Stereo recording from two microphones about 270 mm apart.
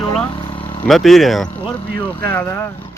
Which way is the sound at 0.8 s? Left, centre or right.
Centre.